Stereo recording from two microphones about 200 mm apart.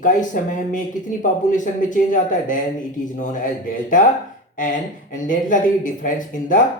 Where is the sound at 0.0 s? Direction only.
40° left (ahead or behind).